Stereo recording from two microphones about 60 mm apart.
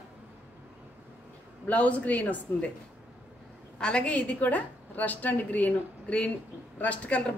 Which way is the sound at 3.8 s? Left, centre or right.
Centre.